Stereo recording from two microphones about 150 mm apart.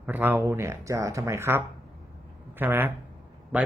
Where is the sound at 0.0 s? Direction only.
10° right (ahead or behind).